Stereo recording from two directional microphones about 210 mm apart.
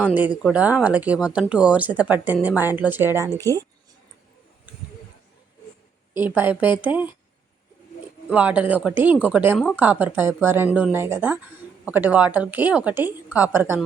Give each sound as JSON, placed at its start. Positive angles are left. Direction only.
{"t": 0.0, "sound": "speech", "side_deg": -5}
{"t": 6.1, "sound": "speech", "side_deg": -10}
{"t": 8.3, "sound": "speech", "side_deg": -5}